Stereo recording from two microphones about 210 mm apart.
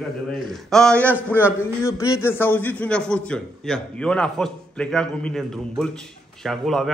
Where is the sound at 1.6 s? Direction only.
15° left (ahead or behind).